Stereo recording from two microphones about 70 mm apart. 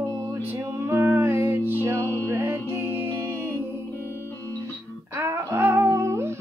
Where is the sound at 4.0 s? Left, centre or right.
Left.